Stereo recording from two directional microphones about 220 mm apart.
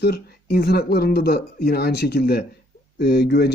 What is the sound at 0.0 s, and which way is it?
Speech, 45° left (ahead or behind).